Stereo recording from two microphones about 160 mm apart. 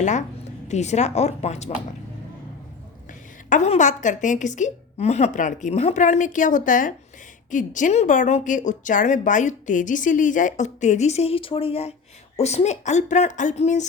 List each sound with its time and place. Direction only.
0.0 s a woman's voice: 50° left (ahead or behind)
3.1 s a woman's voice: 50° left (ahead or behind)